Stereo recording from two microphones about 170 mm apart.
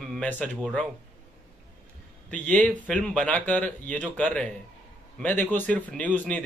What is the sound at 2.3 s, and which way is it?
Speech, 10° left (ahead or behind).